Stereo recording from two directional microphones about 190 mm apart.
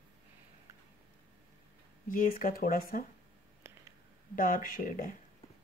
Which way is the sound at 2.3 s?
45° left (ahead or behind).